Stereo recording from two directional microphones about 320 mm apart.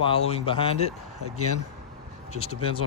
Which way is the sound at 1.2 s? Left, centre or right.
Left.